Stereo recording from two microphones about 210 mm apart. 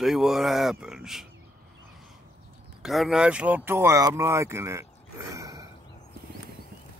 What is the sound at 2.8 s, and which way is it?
Speech, centre (ahead or behind).